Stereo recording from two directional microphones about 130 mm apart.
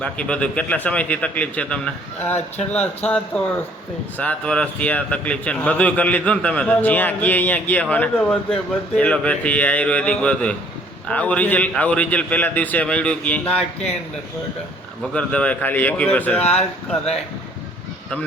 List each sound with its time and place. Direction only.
0.0 s a man's voice: 10° left (ahead or behind)
15.1 s a man's voice: 10° left (ahead or behind)
16.4 s speech: 55° left (ahead or behind)